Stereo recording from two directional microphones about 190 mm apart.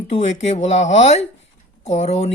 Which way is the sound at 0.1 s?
35° left (ahead or behind).